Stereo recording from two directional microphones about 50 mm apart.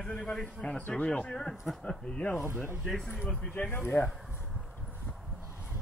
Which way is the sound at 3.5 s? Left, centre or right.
Left.